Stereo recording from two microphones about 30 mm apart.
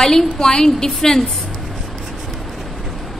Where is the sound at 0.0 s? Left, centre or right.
Centre.